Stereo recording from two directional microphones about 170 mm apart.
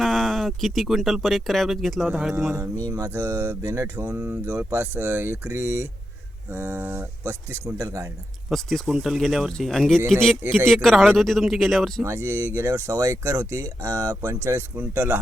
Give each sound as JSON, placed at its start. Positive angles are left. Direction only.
{"t": 0.0, "sound": "speech", "side_deg": 0}
{"t": 8.4, "sound": "speech", "side_deg": 0}
{"t": 12.0, "sound": "speech", "side_deg": -15}